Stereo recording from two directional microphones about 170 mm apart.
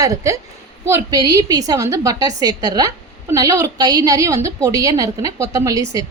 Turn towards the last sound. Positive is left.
turn(degrees=-20)  # may be behind; listen again after turning